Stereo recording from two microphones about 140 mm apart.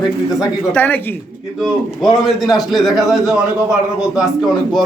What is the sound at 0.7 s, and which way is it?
Speech, 10° left (ahead or behind).